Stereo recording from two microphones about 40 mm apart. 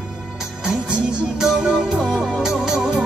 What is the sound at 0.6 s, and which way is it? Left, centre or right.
Music, right.